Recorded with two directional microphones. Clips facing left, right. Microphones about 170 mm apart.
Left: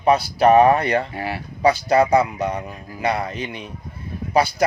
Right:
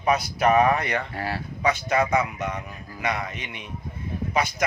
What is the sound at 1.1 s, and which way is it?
Speech, 15° left (ahead or behind).